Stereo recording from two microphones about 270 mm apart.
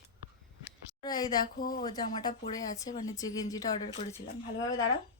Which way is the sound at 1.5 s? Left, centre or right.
Left.